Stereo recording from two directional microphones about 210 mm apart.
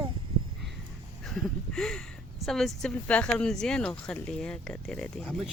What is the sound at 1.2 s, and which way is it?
Speech, centre (ahead or behind).